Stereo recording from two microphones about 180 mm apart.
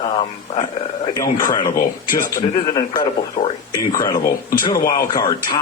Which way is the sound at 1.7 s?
50° left (ahead or behind).